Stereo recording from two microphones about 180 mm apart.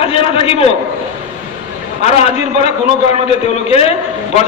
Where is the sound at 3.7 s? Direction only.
35° left (ahead or behind).